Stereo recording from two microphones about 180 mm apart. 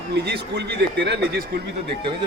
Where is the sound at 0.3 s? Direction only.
70° right (ahead or behind).